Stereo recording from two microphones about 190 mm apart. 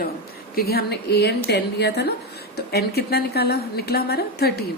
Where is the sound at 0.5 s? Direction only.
55° left (ahead or behind).